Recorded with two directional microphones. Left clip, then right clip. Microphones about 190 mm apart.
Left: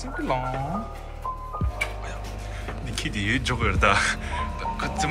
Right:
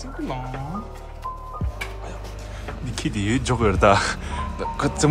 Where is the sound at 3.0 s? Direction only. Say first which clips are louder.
Right 1 dB; 20° right (ahead or behind).